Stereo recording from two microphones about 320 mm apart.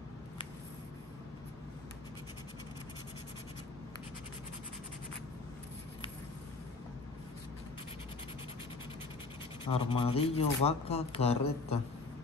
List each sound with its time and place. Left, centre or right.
9.7 s speech: centre